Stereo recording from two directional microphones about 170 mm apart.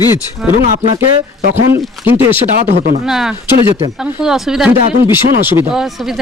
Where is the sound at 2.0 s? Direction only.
10° right (ahead or behind).